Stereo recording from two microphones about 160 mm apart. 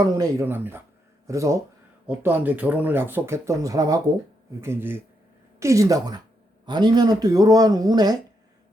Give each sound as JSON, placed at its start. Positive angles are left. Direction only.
{"t": 0.0, "sound": "speech", "side_deg": -20}